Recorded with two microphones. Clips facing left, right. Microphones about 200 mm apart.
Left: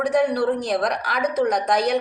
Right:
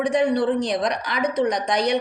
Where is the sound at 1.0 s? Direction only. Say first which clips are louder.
Even; 5° left (ahead or behind).